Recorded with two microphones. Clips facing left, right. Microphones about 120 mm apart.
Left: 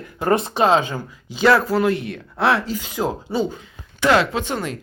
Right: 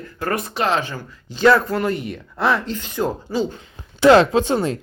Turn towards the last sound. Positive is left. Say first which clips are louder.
# right 6 dB
turn(degrees=-30)  # may be behind; listen again after turning